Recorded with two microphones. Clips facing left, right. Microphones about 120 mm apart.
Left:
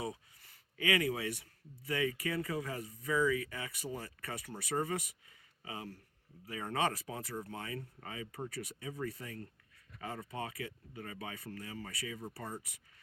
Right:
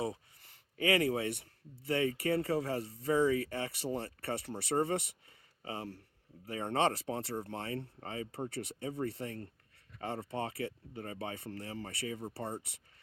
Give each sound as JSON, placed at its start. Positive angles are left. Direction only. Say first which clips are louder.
{"t": 0.8, "sound": "speech", "louder": "right 3 dB", "side_deg": -30}